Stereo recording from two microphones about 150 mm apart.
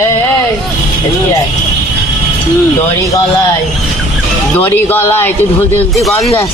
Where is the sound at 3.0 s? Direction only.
20° left (ahead or behind).